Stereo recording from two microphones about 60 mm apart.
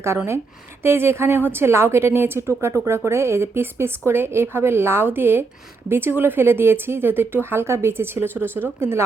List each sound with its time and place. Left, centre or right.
0.8 s a woman's voice: right
7.7 s speech: right